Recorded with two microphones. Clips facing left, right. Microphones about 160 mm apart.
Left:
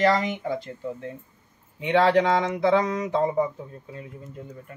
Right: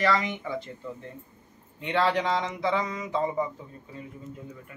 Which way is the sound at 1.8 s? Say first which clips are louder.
Left 6 dB; 65° left (ahead or behind).